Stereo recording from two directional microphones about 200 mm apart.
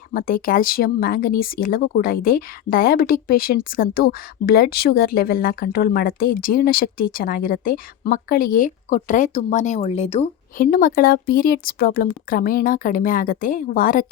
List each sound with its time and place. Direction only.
0.1 s speech: 45° left (ahead or behind)
10.6 s speech: 45° left (ahead or behind)